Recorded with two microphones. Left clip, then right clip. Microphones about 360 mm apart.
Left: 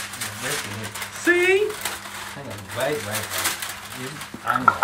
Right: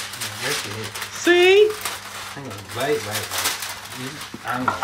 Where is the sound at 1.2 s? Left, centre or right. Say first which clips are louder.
Right 3 dB; centre.